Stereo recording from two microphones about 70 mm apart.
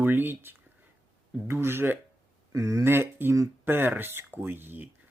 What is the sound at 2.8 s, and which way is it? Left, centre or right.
Speech, right.